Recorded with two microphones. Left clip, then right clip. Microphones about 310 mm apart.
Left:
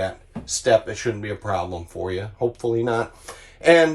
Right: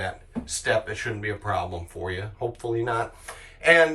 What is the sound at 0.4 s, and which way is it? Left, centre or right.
Speech, centre.